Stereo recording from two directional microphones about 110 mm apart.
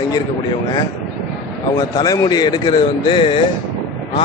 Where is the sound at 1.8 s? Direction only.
35° left (ahead or behind).